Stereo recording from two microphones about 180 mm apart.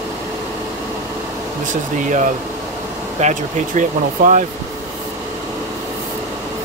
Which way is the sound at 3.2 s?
45° right (ahead or behind).